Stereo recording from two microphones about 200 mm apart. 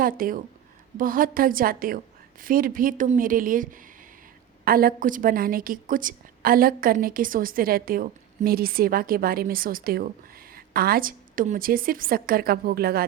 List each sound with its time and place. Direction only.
0.0 s a woman's voice: 45° right (ahead or behind)